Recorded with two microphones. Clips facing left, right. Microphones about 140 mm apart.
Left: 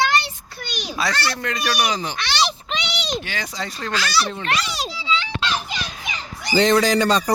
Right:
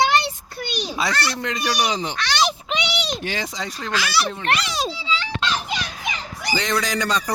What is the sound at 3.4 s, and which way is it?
Speech, 20° right (ahead or behind).